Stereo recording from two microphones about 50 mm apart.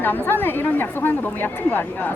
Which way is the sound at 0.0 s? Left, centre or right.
Left.